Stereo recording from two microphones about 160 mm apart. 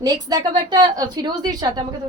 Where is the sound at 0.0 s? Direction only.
25° right (ahead or behind).